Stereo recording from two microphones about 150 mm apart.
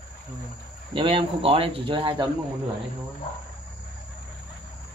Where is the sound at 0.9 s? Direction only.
35° right (ahead or behind).